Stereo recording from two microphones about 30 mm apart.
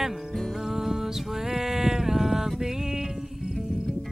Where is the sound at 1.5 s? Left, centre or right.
Centre.